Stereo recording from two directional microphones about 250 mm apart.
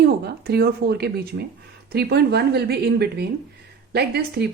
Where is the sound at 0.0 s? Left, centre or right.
Right.